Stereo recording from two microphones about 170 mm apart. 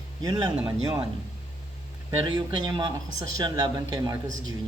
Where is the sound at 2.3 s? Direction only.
25° right (ahead or behind).